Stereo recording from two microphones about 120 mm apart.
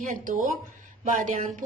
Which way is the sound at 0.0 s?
90° right.